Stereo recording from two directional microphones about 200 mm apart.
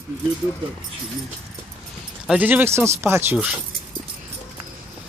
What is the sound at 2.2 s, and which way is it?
Speech, 5° right (ahead or behind).